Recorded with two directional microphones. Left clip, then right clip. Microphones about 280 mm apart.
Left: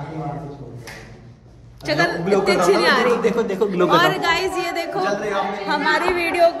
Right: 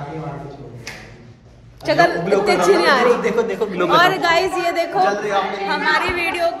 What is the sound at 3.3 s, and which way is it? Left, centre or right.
Speech, centre.